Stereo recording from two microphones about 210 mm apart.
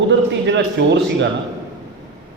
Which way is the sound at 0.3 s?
55° right (ahead or behind).